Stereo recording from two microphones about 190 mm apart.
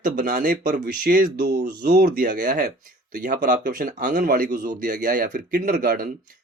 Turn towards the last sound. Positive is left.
turn(degrees=-50)  # may be behind; listen again after turning